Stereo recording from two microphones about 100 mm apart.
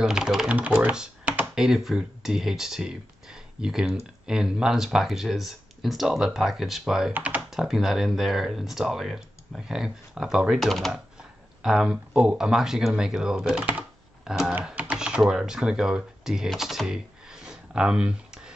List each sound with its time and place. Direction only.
0.0 s speech: 5° right (ahead or behind)
7.1 s speech: 15° right (ahead or behind)
7.5 s speech: 5° right (ahead or behind)